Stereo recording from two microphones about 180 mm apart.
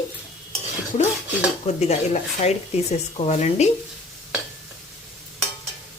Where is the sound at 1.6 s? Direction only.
35° left (ahead or behind).